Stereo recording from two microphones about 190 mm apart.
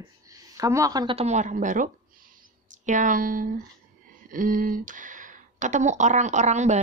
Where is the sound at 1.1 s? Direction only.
35° right (ahead or behind).